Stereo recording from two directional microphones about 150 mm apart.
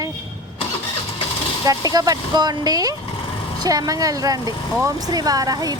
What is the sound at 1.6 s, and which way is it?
Speech, 25° right (ahead or behind).